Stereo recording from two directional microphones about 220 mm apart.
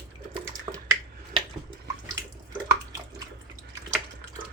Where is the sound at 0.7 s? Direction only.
20° right (ahead or behind).